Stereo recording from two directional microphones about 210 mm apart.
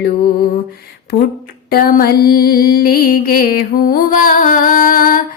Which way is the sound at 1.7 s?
45° left (ahead or behind).